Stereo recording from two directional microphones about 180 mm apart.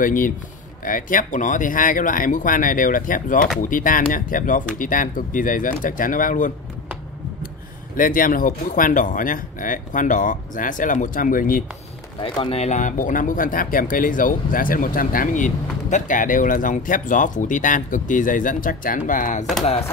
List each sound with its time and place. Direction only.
0.0 s a man's voice: 50° left (ahead or behind)
7.9 s a man's voice: 50° left (ahead or behind)
12.2 s a man's voice: 30° left (ahead or behind); by 19.4 s 45° left (ahead or behind)